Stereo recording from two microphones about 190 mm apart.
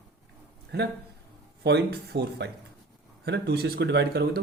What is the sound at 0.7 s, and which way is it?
Speech, 60° right (ahead or behind).